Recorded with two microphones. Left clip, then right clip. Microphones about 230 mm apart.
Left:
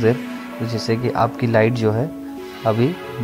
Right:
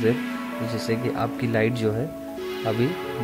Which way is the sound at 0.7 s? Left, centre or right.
Centre.